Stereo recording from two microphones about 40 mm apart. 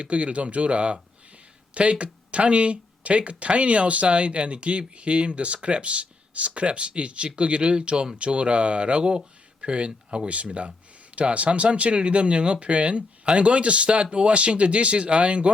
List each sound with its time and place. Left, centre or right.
0.0 s speech: right